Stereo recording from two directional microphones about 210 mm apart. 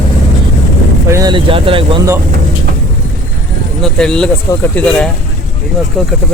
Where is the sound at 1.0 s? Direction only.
15° right (ahead or behind).